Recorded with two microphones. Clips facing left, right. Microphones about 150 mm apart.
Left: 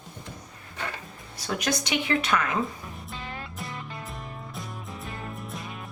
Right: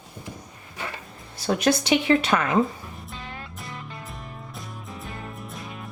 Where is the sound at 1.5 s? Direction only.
30° right (ahead or behind).